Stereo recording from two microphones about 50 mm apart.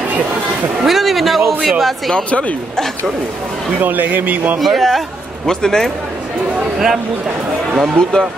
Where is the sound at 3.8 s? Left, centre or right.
Right.